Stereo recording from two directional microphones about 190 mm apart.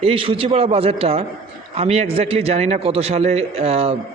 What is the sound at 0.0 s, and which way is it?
A man's voice, 30° right (ahead or behind).